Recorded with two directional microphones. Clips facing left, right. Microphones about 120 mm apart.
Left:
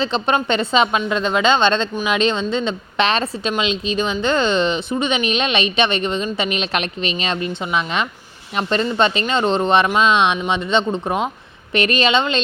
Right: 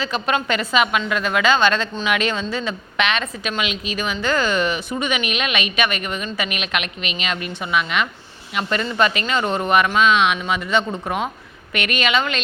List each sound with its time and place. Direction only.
0.0 s speech: 25° left (ahead or behind)